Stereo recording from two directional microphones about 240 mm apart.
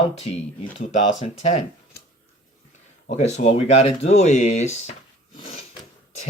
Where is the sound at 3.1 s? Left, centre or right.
Left.